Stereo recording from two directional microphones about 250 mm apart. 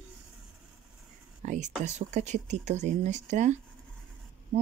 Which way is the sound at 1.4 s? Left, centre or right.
Right.